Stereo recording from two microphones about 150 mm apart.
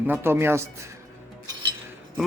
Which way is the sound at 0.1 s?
15° right (ahead or behind).